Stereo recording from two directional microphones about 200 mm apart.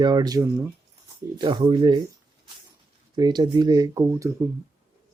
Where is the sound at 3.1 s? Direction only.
20° right (ahead or behind).